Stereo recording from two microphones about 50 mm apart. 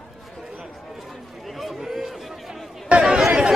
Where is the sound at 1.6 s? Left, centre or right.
Centre.